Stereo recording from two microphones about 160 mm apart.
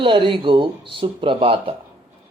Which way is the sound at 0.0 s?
30° right (ahead or behind).